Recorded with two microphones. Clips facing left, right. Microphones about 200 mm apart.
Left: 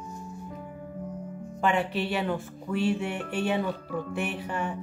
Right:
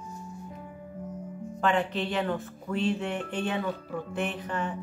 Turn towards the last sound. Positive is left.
turn(degrees=10)  # may be behind; listen again after turning